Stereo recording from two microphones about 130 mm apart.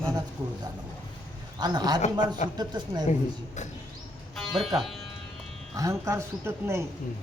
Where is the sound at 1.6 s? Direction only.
30° right (ahead or behind).